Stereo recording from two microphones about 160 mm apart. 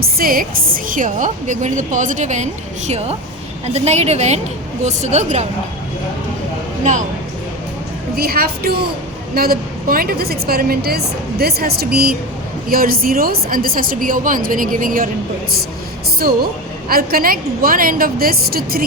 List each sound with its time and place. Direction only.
0.0 s a woman's voice: 65° right (ahead or behind); by 5.5 s 45° right (ahead or behind)
8.1 s a woman's voice: 70° right (ahead or behind)
16.9 s a woman's voice: 70° right (ahead or behind)